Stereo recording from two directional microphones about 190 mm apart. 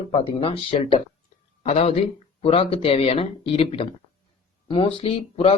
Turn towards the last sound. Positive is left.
turn(degrees=30)  # may be behind; listen again after turning